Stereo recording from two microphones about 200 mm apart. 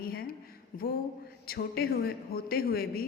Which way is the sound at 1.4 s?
50° left (ahead or behind).